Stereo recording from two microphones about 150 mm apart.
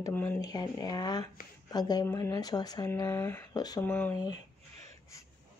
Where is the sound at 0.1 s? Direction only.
10° left (ahead or behind).